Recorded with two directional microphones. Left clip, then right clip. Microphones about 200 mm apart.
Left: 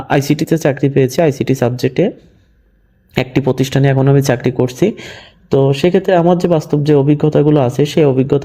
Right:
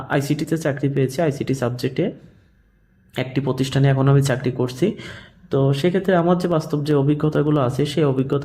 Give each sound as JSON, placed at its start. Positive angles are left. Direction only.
{"t": 0.1, "sound": "speech", "side_deg": 30}
{"t": 3.2, "sound": "speech", "side_deg": 30}